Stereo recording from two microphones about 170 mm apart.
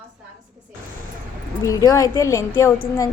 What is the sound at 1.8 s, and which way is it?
A woman's voice, 20° left (ahead or behind).